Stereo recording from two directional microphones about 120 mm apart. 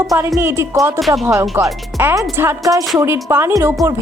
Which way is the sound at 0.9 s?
Centre (ahead or behind).